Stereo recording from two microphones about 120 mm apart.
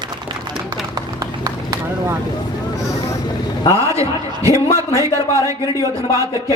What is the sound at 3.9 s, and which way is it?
A man's voice, 25° right (ahead or behind).